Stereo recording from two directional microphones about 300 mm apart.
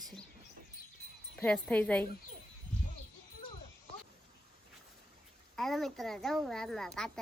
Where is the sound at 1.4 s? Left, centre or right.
Centre.